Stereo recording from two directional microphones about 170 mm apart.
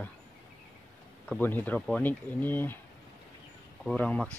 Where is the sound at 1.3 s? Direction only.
10° left (ahead or behind).